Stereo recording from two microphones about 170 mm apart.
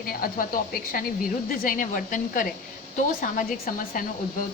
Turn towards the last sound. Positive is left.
turn(degrees=55)  # may be behind; listen again after turning